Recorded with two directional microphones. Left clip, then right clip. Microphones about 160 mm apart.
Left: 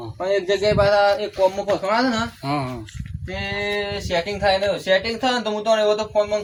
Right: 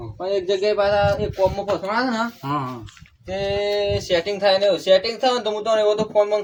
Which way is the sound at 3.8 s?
35° right (ahead or behind).